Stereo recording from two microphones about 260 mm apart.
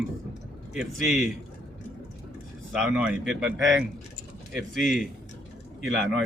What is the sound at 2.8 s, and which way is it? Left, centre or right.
Speech, centre.